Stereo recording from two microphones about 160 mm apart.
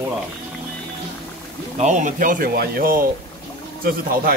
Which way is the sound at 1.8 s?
50° right (ahead or behind).